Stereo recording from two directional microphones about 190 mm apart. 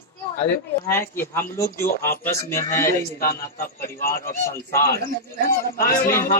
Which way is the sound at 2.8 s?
50° left (ahead or behind).